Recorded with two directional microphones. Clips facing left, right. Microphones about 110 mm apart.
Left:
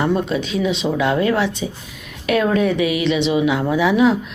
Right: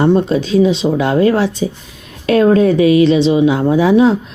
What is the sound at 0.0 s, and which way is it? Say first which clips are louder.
Speech: right 7 dB; 30° right (ahead or behind).